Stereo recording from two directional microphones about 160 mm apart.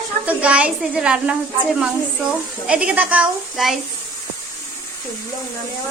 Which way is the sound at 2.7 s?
5° right (ahead or behind).